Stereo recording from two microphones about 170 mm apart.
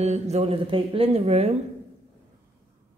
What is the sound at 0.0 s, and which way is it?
Speech, 40° right (ahead or behind).